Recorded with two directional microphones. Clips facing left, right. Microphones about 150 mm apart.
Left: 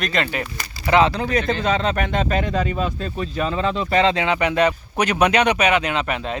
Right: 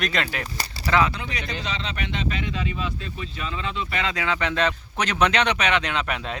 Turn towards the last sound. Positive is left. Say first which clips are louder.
# left 4 dB
turn(degrees=0)  # may be behind; listen again after turning